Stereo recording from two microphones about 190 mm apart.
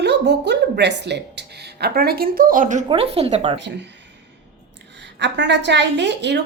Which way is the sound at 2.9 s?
30° right (ahead or behind).